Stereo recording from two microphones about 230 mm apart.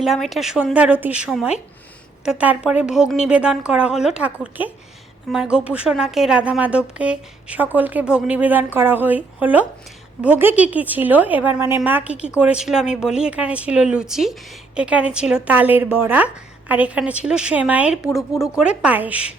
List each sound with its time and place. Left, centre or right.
0.0 s a woman's voice: centre